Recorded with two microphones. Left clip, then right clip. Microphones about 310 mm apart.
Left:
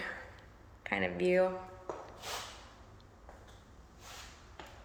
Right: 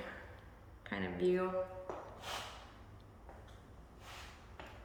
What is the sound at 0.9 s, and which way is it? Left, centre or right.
Speech, right.